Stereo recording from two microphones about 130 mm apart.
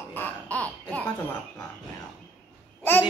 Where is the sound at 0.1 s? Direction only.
10° left (ahead or behind).